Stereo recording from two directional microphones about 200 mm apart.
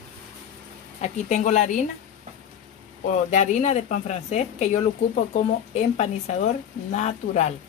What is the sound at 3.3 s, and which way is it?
Speech, 40° left (ahead or behind).